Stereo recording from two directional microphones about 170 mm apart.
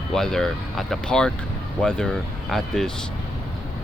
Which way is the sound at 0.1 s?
5° left (ahead or behind).